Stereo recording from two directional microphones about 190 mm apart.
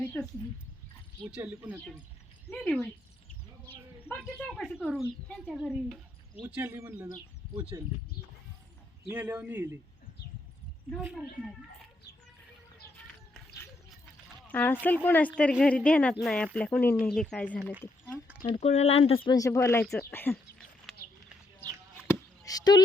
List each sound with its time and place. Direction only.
0.0 s speech: 5° left (ahead or behind)
1.2 s speech: 5° right (ahead or behind)
2.6 s speech: 5° left (ahead or behind)
4.2 s speech: 5° left (ahead or behind)
6.5 s speech: 10° right (ahead or behind)
9.1 s speech: 10° right (ahead or behind)
11.0 s speech: 5° right (ahead or behind)
14.4 s speech: 10° left (ahead or behind)
18.4 s speech: 35° left (ahead or behind); by 20.3 s 10° left (ahead or behind)
20.3 s a sound: centre (ahead or behind)
21.6 s a sound: 10° left (ahead or behind)